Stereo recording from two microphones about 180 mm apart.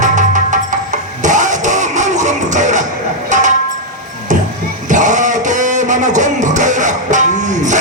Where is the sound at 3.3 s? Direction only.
45° right (ahead or behind).